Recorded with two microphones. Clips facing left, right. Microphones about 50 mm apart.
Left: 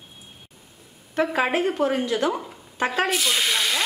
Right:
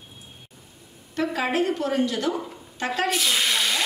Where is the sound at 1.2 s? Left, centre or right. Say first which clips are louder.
Left 2 dB; centre.